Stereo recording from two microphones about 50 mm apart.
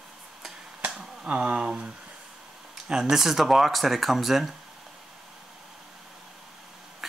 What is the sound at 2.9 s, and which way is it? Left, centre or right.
Speech, centre.